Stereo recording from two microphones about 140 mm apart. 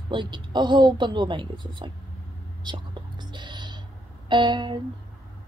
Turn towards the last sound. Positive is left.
turn(degrees=-35)  # may be behind; listen again after turning